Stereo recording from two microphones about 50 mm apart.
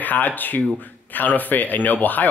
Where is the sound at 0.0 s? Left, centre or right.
Left.